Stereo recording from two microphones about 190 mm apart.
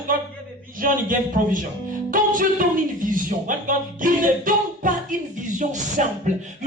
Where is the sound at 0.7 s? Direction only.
45° right (ahead or behind).